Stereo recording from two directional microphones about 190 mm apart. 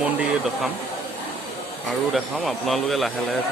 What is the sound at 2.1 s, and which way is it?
Speech, centre (ahead or behind).